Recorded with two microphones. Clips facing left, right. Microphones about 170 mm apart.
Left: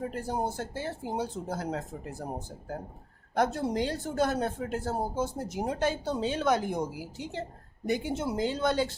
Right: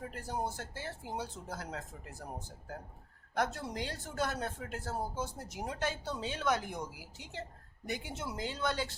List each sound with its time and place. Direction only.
0.0 s speech: 30° left (ahead or behind)